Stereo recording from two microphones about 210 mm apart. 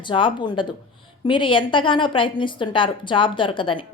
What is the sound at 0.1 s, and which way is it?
A woman's voice, 25° left (ahead or behind).